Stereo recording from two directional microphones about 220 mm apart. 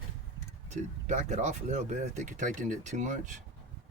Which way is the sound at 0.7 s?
35° right (ahead or behind).